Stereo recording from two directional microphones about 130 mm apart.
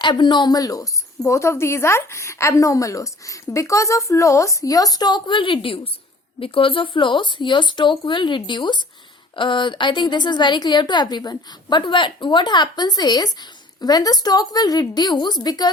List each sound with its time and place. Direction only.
0.0 s a woman's voice: 35° left (ahead or behind)